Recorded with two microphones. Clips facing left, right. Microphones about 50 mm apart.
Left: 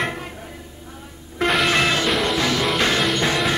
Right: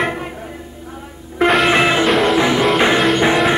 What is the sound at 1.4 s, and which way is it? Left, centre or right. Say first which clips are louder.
Music: right 6 dB; centre.